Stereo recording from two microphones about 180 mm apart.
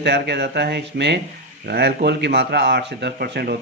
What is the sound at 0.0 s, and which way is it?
Speech, 70° right (ahead or behind).